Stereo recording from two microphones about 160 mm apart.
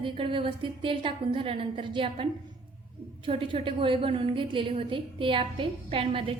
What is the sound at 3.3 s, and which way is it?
A woman's voice, 35° right (ahead or behind).